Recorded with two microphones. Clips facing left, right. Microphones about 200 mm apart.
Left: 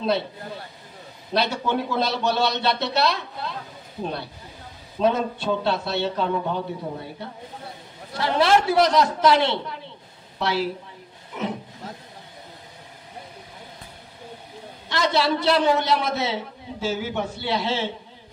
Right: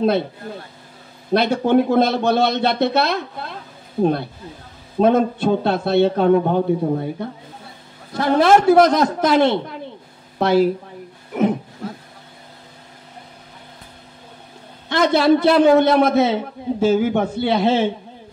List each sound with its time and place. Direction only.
1.3 s a man's voice: 50° right (ahead or behind)
14.9 s a man's voice: 55° right (ahead or behind)